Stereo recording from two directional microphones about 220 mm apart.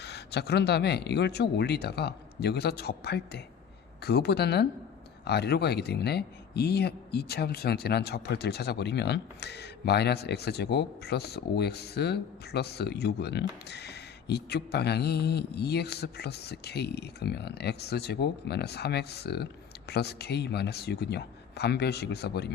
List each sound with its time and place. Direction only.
0.0 s speech: 50° left (ahead or behind)